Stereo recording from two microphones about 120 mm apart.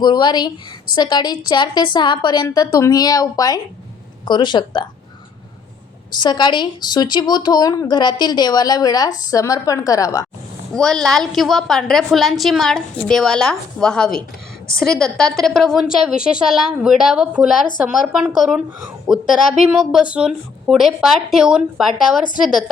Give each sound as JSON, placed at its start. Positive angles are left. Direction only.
{"t": 0.0, "sound": "a woman's voice", "side_deg": 35}
{"t": 6.1, "sound": "a woman's voice", "side_deg": 40}
{"t": 10.8, "sound": "a woman's voice", "side_deg": 5}